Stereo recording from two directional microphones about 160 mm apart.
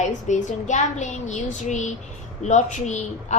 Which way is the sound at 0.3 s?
50° left (ahead or behind).